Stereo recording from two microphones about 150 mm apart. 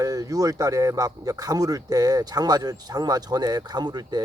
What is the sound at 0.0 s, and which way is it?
Speech, 25° right (ahead or behind).